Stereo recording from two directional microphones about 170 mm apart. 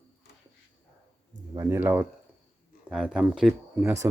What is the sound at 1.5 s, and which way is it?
Speech, 20° right (ahead or behind).